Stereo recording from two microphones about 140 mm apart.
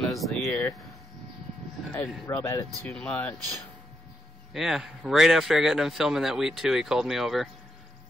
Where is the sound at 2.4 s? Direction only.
20° left (ahead or behind).